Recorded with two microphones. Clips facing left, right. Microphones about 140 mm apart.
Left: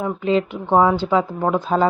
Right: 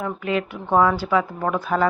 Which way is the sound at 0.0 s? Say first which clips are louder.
Left 5 dB; 25° left (ahead or behind).